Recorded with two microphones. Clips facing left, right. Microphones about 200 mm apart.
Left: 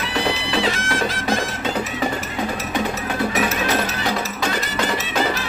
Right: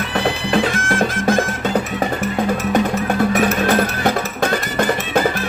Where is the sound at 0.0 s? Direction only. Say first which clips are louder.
Right 3 dB; 55° right (ahead or behind).